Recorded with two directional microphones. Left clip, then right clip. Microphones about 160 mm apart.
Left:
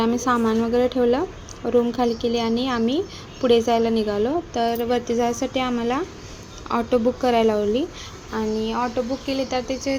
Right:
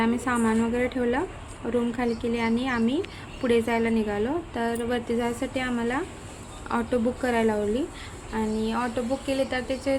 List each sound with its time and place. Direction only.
0.0 s a woman's voice: 15° left (ahead or behind)